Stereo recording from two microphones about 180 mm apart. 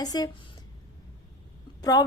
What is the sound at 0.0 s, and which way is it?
Speech, 20° left (ahead or behind).